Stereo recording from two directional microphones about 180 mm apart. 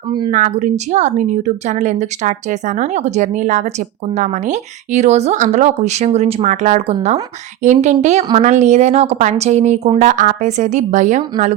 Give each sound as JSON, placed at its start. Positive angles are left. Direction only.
{"t": 0.3, "sound": "speech", "side_deg": -45}